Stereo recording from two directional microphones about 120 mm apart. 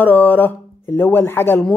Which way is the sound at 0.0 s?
15° left (ahead or behind).